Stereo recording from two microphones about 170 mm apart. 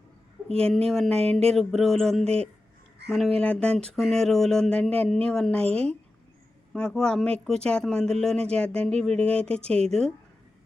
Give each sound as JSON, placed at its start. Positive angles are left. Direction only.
{"t": 0.5, "sound": "speech", "side_deg": 5}
{"t": 1.2, "sound": "speech", "side_deg": -35}
{"t": 1.5, "sound": "speech", "side_deg": 0}